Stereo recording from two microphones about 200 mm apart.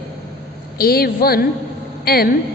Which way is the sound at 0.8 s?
50° left (ahead or behind).